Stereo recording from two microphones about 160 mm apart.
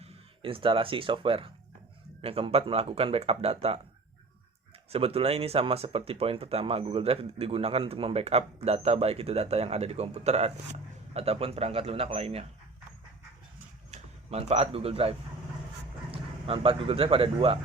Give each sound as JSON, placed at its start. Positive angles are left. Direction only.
{"t": 0.0, "sound": "speech", "side_deg": -35}
{"t": 4.9, "sound": "speech", "side_deg": -35}
{"t": 13.9, "sound": "speech", "side_deg": -40}
{"t": 16.1, "sound": "speech", "side_deg": -35}